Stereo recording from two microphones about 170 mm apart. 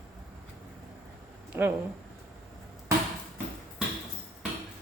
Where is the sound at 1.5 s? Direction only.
15° right (ahead or behind).